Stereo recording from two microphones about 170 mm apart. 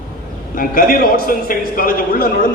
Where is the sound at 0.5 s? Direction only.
55° left (ahead or behind).